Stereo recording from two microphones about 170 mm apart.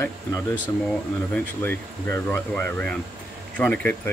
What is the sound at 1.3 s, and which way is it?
Speech, 10° left (ahead or behind).